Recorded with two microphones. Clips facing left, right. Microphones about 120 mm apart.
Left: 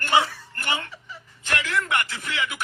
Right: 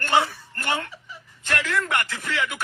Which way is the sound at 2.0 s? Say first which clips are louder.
Right 1 dB; 40° right (ahead or behind).